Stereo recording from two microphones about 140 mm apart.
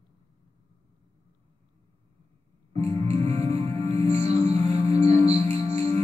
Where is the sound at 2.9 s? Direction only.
40° right (ahead or behind).